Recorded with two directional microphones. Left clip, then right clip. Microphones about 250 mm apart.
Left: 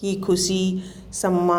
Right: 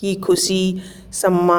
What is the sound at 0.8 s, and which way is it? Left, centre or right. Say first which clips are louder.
Speech: right 6 dB; right.